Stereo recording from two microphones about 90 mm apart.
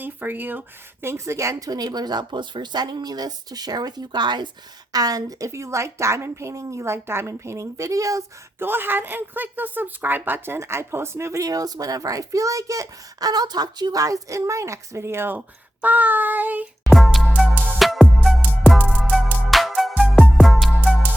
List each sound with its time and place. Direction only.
0.0 s speech: 20° right (ahead or behind); by 4.4 s 55° right (ahead or behind)
4.9 s speech: 45° right (ahead or behind)
5.5 s a woman's voice: 35° right (ahead or behind)
8.5 s a woman's voice: 25° right (ahead or behind)
16.9 s music: centre (ahead or behind)